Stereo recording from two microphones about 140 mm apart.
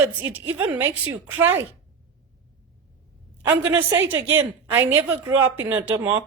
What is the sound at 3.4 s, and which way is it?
A woman's voice, 15° right (ahead or behind).